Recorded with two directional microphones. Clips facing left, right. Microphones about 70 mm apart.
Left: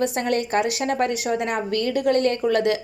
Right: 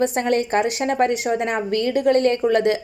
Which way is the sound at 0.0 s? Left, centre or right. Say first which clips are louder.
Right 3 dB; right.